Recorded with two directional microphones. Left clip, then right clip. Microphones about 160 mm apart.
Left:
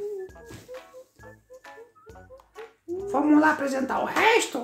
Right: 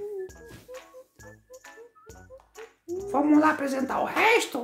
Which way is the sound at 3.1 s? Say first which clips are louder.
Left 1 dB; 30° right (ahead or behind).